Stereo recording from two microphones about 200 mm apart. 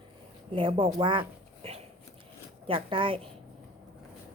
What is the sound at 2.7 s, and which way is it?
Speech, 25° right (ahead or behind).